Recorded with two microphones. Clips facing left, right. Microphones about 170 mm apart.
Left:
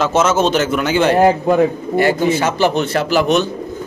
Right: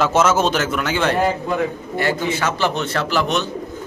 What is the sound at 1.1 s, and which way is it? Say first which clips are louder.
Speech: left 7 dB; 50° left (ahead or behind).